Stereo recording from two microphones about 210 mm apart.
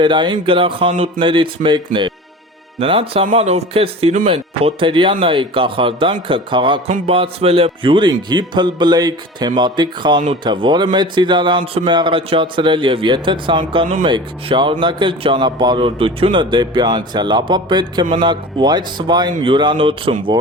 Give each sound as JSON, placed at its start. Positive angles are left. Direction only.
{"t": 0.0, "sound": "speech", "side_deg": -20}